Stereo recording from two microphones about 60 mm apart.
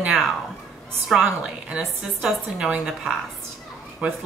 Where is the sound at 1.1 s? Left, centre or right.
Centre.